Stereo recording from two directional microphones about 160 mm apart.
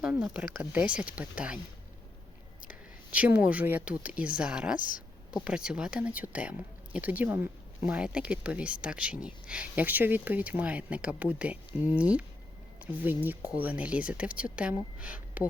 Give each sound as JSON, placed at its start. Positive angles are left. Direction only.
{"t": 0.0, "sound": "speech", "side_deg": -5}
{"t": 3.1, "sound": "speech", "side_deg": -10}